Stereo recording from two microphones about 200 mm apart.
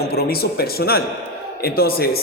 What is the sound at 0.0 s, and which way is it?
A man's voice, 50° left (ahead or behind).